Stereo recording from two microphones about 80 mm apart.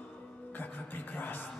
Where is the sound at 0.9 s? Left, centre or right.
Left.